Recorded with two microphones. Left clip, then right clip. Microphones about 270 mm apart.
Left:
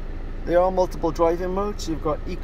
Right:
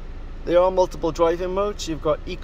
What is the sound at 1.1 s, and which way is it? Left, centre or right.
Speech, centre.